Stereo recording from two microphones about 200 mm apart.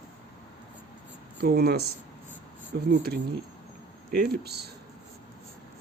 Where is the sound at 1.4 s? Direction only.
50° right (ahead or behind).